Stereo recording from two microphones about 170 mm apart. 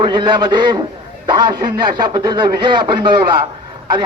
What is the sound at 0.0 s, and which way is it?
Speech, 30° right (ahead or behind).